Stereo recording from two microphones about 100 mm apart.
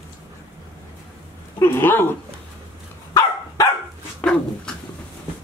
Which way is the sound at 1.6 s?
25° left (ahead or behind).